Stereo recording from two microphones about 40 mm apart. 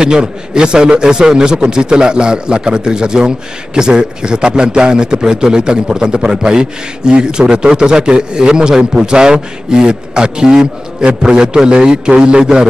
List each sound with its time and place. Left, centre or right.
0.0 s a man's voice: centre